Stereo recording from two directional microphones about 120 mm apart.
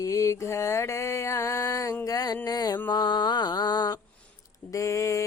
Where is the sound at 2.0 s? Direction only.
30° left (ahead or behind).